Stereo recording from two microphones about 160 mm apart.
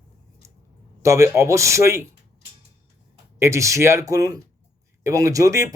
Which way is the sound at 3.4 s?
20° right (ahead or behind).